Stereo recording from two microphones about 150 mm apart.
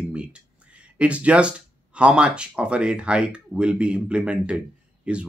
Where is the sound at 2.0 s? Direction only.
5° right (ahead or behind).